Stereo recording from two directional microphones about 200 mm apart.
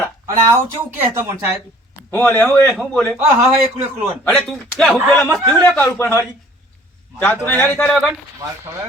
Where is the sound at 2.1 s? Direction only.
10° left (ahead or behind).